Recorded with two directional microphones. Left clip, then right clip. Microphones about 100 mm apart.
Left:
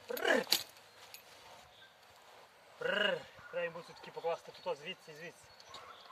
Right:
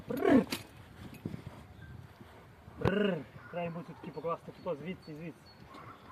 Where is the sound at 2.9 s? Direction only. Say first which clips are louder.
Left 3 dB; 40° left (ahead or behind).